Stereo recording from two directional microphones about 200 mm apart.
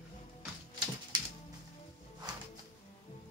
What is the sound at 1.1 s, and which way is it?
Music, 20° right (ahead or behind).